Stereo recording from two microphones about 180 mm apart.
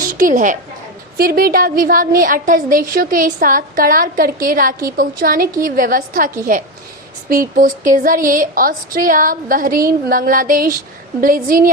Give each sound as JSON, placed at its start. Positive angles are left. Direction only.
{"t": 0.2, "sound": "a woman's voice", "side_deg": -45}
{"t": 1.1, "sound": "a woman's voice", "side_deg": -55}